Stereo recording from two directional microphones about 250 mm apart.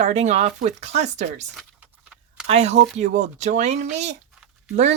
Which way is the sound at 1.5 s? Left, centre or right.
Centre.